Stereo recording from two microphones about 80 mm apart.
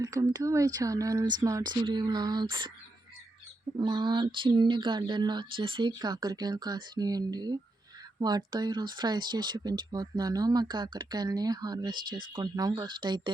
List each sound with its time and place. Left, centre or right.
0.0 s speech: right
1.2 s speech: right
1.7 s speech: right
3.8 s speech: right